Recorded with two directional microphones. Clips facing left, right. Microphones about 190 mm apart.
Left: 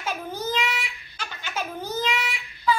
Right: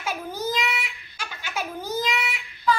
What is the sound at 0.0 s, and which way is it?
Babbling, 10° right (ahead or behind).